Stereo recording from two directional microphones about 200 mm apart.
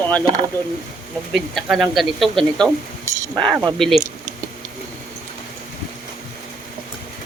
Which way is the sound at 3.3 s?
20° right (ahead or behind).